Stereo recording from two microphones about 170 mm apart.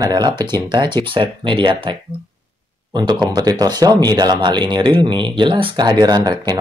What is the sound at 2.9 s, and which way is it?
Speech, 25° right (ahead or behind).